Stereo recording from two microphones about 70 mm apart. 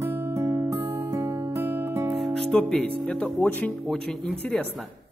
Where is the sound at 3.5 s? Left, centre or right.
Left.